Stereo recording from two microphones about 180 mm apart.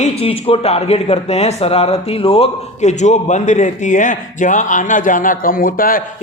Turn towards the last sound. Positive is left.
turn(degrees=50)  # may be behind; listen again after turning